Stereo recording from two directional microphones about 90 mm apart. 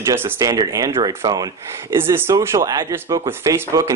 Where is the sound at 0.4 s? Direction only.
40° right (ahead or behind).